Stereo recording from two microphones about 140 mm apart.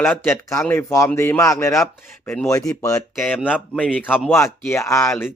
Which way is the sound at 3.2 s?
Centre (ahead or behind).